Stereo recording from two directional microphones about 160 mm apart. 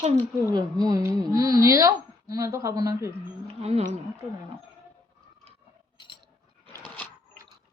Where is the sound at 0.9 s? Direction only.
20° right (ahead or behind).